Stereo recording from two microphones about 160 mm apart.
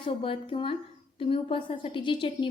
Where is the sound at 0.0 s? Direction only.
35° left (ahead or behind).